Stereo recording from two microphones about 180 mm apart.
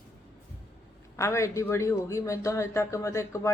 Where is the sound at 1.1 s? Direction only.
15° left (ahead or behind).